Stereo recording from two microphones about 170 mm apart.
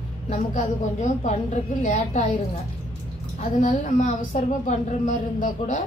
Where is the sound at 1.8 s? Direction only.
45° left (ahead or behind).